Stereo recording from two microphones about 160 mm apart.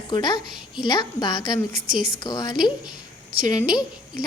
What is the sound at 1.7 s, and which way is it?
Speech, 60° right (ahead or behind).